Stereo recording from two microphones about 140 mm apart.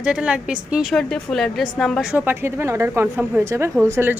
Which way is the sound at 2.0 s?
10° right (ahead or behind).